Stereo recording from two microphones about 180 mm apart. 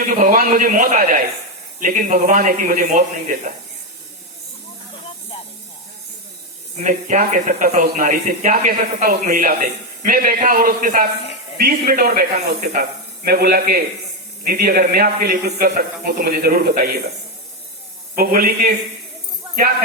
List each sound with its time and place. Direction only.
0.2 s speech: 50° right (ahead or behind)
6.7 s a man's voice: 45° right (ahead or behind)
18.2 s a man's voice: 55° right (ahead or behind)